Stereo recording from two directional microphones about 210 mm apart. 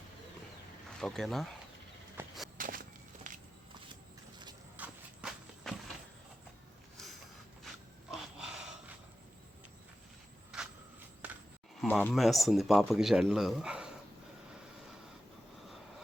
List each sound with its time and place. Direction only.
0.9 s a man's voice: centre (ahead or behind)
2.2 s walk: 10° right (ahead or behind)
2.6 s walk: 40° right (ahead or behind)
4.8 s walk: 5° right (ahead or behind)
8.1 s a sound: centre (ahead or behind)
10.5 s cricket: 5° right (ahead or behind)
11.8 s a man's voice: 10° left (ahead or behind)